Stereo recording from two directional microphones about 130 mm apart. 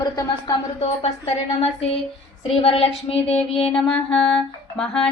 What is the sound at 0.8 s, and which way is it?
Speech, 50° left (ahead or behind).